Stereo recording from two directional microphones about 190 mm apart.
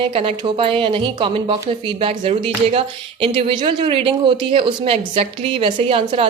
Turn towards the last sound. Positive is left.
turn(degrees=-30)  # may be behind; listen again after turning